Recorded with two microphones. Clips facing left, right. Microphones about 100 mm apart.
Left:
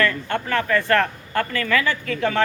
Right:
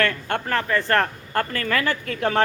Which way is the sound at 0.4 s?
35° right (ahead or behind).